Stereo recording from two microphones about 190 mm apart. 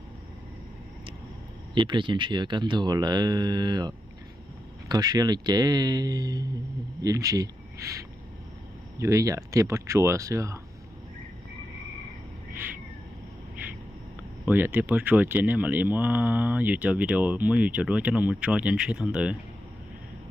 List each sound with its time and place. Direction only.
1.8 s speech: 25° right (ahead or behind)
9.0 s speech: 15° right (ahead or behind)
14.4 s speech: 10° right (ahead or behind)